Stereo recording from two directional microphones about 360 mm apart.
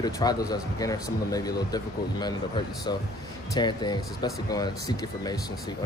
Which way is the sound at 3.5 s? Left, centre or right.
Centre.